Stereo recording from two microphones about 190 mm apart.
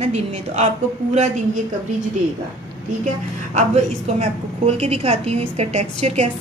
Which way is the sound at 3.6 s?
35° right (ahead or behind).